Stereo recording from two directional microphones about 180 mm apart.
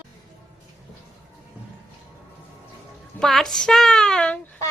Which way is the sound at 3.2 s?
Centre (ahead or behind).